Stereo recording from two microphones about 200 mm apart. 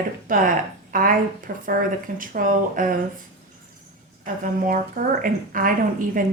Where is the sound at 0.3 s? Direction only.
45° right (ahead or behind).